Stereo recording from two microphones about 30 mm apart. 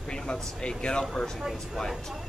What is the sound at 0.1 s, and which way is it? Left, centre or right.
Speech, left.